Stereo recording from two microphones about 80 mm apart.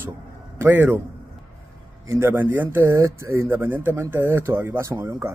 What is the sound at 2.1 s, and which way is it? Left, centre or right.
Speech, right.